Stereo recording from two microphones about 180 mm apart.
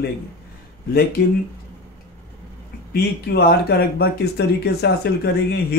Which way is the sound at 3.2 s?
60° left (ahead or behind).